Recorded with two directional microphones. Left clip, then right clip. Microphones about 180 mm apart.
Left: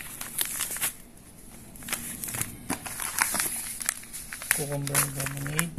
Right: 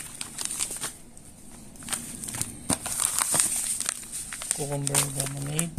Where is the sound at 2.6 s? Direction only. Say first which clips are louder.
Right 6 dB; 45° right (ahead or behind).